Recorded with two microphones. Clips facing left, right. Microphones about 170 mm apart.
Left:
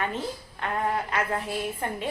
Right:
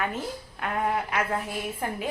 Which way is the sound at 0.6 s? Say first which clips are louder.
Even; 5° right (ahead or behind).